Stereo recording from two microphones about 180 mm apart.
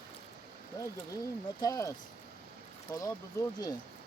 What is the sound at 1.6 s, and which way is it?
Speech, 20° left (ahead or behind).